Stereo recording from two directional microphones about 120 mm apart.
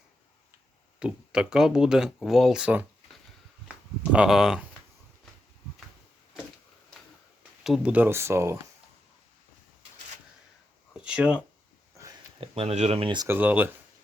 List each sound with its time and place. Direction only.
0.9 s speech: 5° right (ahead or behind)
4.1 s speech: 5° right (ahead or behind)
7.6 s speech: 5° right (ahead or behind); by 8.5 s 20° right (ahead or behind)
11.0 s speech: 10° right (ahead or behind)
12.4 s speech: 55° right (ahead or behind)
13.2 s speech: 15° right (ahead or behind)